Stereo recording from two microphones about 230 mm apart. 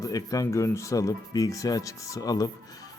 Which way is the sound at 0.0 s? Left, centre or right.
Centre.